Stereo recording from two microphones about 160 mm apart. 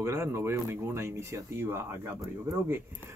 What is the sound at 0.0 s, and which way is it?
Speech, 15° right (ahead or behind).